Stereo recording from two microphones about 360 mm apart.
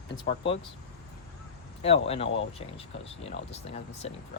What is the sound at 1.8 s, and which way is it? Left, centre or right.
Speech, centre.